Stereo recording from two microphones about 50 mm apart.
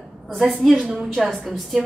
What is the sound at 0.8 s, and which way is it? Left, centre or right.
Speech, centre.